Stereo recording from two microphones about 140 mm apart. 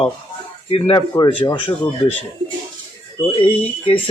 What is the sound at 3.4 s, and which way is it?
Speech, 40° left (ahead or behind).